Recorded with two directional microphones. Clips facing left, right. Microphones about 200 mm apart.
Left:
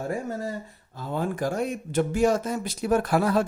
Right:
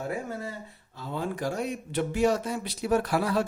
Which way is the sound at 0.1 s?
45° left (ahead or behind).